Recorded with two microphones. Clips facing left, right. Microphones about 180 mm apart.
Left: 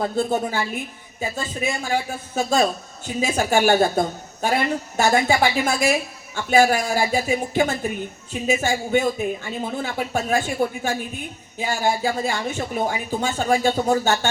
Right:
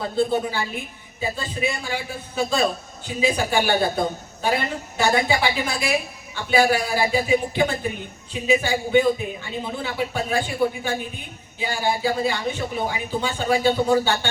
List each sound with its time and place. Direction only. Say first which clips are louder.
0.0 s speech: even; 45° left (ahead or behind)